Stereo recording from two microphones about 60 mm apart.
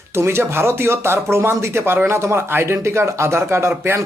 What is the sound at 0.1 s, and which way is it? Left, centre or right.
Speech, right.